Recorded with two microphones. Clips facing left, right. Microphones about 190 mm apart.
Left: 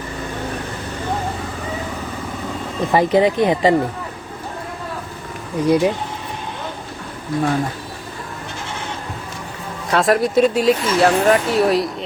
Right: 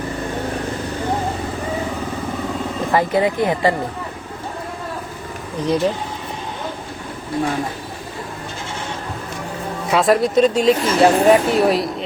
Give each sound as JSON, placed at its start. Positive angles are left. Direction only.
{"t": 2.9, "sound": "speech", "side_deg": 20}
{"t": 5.5, "sound": "speech", "side_deg": 10}
{"t": 9.9, "sound": "speech", "side_deg": 0}